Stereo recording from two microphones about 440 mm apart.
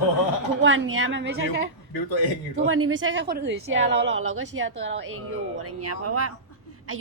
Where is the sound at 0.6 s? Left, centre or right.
Right.